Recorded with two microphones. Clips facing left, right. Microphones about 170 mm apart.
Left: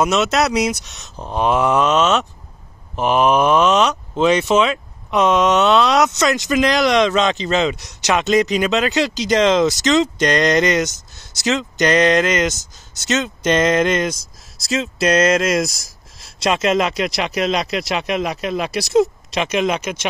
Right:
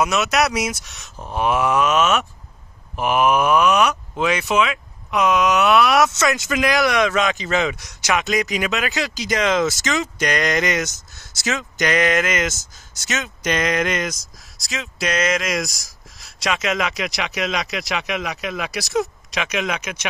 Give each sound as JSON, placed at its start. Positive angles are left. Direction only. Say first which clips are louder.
{"t": 0.0, "sound": "speech", "louder": "left 2 dB", "side_deg": 25}
{"t": 15.3, "sound": "speech", "louder": "left 6 dB", "side_deg": 30}